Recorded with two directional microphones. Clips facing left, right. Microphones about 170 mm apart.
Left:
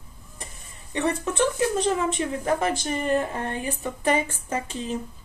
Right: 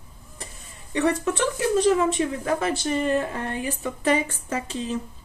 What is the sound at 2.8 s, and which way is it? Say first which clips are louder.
Speech: right 1 dB; 15° left (ahead or behind).